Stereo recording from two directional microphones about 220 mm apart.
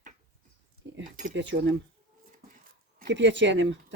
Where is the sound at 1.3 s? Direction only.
55° right (ahead or behind).